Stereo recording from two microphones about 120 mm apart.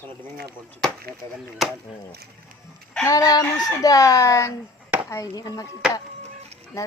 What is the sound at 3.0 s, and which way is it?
Speech, 30° left (ahead or behind).